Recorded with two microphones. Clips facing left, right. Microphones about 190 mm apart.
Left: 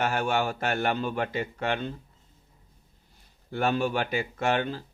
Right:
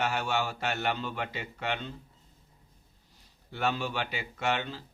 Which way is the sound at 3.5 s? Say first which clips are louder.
Left 5 dB; 50° left (ahead or behind).